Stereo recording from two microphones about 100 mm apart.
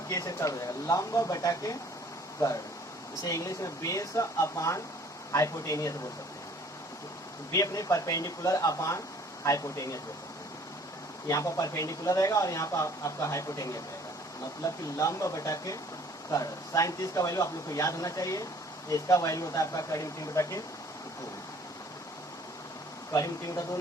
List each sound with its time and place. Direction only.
0.1 s speech: 35° left (ahead or behind)
3.2 s speech: 35° left (ahead or behind)
7.5 s speech: 35° left (ahead or behind)
11.3 s speech: 30° left (ahead or behind)
23.1 s speech: 30° left (ahead or behind)